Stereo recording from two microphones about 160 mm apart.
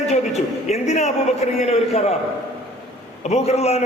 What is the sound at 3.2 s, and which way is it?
Speech, 45° left (ahead or behind).